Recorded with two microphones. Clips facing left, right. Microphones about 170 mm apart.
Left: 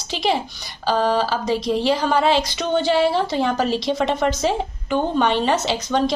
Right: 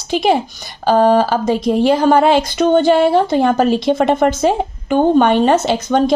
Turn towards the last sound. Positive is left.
turn(degrees=-50)  # may be behind; listen again after turning